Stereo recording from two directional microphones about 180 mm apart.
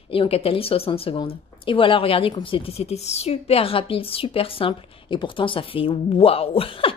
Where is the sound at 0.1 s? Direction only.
30° left (ahead or behind).